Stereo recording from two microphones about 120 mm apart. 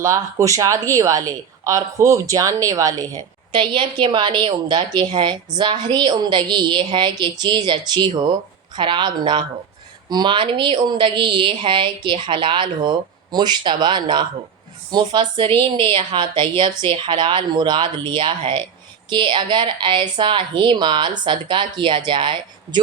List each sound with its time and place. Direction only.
0.0 s speech: 25° right (ahead or behind)
3.5 s a woman's voice: 40° right (ahead or behind)